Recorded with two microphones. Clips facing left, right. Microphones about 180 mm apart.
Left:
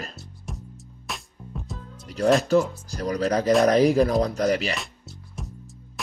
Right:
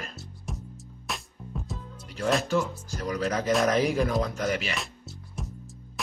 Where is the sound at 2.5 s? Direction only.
35° left (ahead or behind).